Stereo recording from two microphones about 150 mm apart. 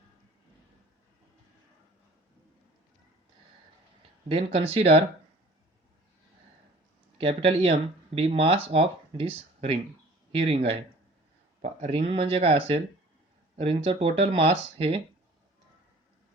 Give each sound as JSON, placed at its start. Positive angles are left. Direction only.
{"t": 4.3, "sound": "speech", "side_deg": -40}
{"t": 7.2, "sound": "speech", "side_deg": -40}